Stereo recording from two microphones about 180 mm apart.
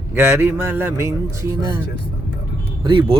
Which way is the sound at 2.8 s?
25° right (ahead or behind).